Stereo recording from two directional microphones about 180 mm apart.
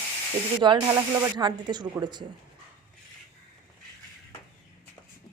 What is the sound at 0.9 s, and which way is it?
Speech, 20° right (ahead or behind).